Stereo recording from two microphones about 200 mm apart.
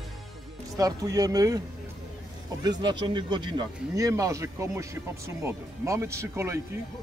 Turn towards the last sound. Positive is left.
turn(degrees=-15)  # may be behind; listen again after turning